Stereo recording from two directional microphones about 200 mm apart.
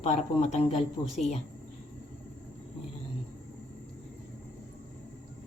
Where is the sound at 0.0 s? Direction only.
35° left (ahead or behind).